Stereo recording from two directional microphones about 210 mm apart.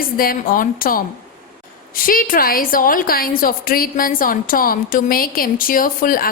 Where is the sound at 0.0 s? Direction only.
45° left (ahead or behind).